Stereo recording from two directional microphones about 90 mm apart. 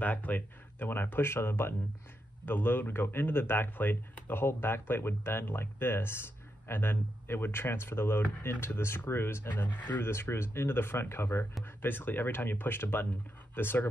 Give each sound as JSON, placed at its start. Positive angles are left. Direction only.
{"t": 0.0, "sound": "speech", "side_deg": 20}